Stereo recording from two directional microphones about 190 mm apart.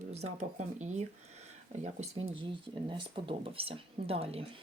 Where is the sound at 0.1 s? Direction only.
35° right (ahead or behind).